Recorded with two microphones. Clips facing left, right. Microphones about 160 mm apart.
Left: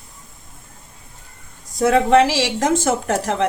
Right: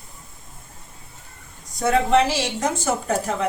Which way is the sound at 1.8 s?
90° left.